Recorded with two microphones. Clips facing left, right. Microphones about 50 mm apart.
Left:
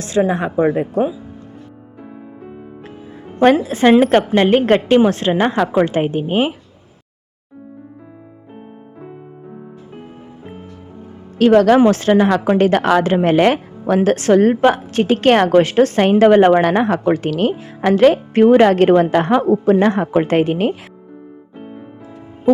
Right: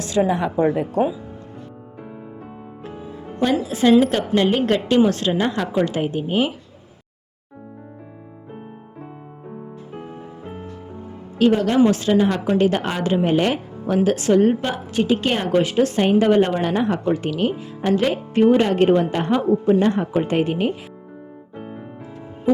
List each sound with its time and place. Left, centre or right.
0.3 s a woman's voice: left
0.5 s speech: left
3.6 s a woman's voice: left
11.3 s a woman's voice: left
11.8 s a woman's voice: left
21.5 s piano: centre